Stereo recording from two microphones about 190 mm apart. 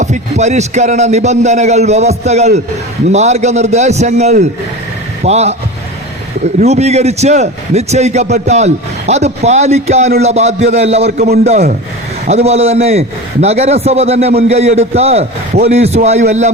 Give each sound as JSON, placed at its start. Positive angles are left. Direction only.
{"t": 0.0, "sound": "a man's voice", "side_deg": -40}
{"t": 6.7, "sound": "a man's voice", "side_deg": -35}